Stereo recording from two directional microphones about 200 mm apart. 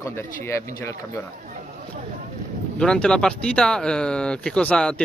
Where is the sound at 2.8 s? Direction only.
5° left (ahead or behind).